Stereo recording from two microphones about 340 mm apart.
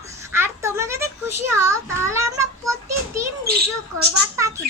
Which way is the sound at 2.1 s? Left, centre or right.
Centre.